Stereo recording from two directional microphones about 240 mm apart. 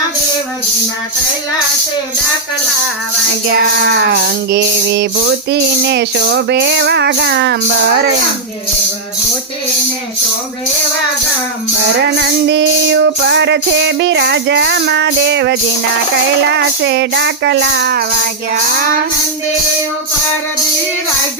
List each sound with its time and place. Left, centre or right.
3.5 s music: right
12.5 s music: right